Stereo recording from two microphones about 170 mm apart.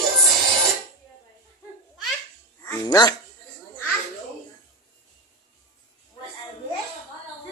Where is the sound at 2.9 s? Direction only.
20° left (ahead or behind).